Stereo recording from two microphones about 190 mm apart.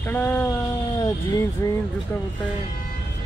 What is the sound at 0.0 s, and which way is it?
Speech, 10° left (ahead or behind).